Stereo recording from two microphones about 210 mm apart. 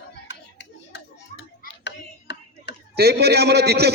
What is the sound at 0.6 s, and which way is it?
Hands, 55° left (ahead or behind).